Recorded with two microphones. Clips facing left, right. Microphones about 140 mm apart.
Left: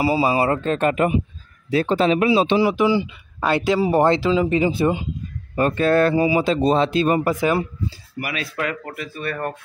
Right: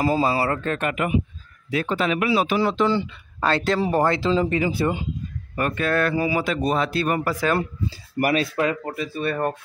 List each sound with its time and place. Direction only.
0.0 s speech: 10° left (ahead or behind)
2.6 s speech: 10° left (ahead or behind)
4.5 s speech: 20° left (ahead or behind)
5.6 s speech: 30° left (ahead or behind)
8.2 s speech: 40° right (ahead or behind)
8.5 s speech: 25° right (ahead or behind)